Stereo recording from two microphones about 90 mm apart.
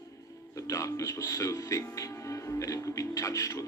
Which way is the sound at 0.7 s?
40° left (ahead or behind).